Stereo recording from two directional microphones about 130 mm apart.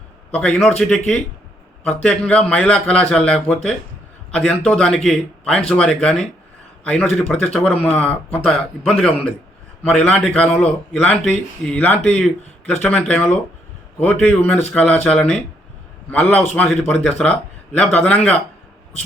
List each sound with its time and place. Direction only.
0.3 s a man's voice: 10° left (ahead or behind)